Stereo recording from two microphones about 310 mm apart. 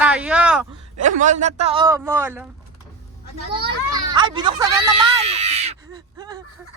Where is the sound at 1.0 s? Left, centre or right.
Right; by 2.4 s centre.